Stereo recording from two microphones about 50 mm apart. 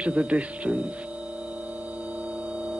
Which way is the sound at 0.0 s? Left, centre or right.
Right.